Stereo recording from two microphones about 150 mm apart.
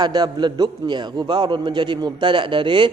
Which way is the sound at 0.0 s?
30° right (ahead or behind).